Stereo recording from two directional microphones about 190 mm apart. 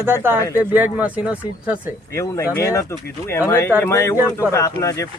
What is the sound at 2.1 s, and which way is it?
Speech, 15° left (ahead or behind).